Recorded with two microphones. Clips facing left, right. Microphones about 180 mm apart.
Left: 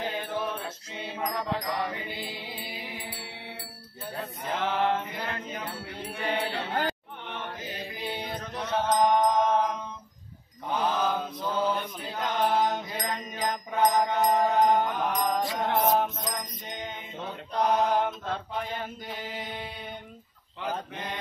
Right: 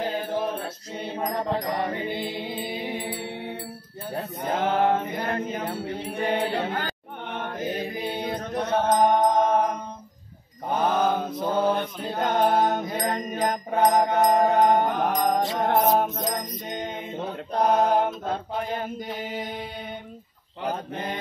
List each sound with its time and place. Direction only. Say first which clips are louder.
0.0 s music: right 5 dB; 40° right (ahead or behind)
0.9 s mantra: right 4 dB; 40° right (ahead or behind); by 3.3 s 55° right (ahead or behind)
4.2 s mantra: right 5 dB; 45° right (ahead or behind)
9.3 s music: right 3 dB; 45° right (ahead or behind)
10.7 s mantra: right 4 dB; 55° right (ahead or behind)
13.9 s music: right 4 dB; 60° right (ahead or behind)
17.5 s mantra: right 4 dB; 50° right (ahead or behind)
20.6 s mantra: right 4 dB; 40° right (ahead or behind)